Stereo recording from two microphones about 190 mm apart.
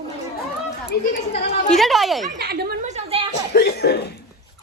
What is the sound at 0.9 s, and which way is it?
Chatter, 55° left (ahead or behind).